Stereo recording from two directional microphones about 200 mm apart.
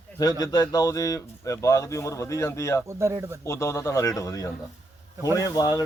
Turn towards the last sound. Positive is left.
turn(degrees=15)  # may be behind; listen again after turning